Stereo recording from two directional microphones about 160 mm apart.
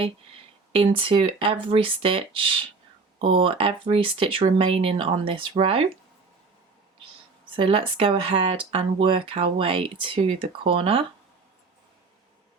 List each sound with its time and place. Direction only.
0.7 s speech: 35° right (ahead or behind)
7.5 s speech: 35° right (ahead or behind)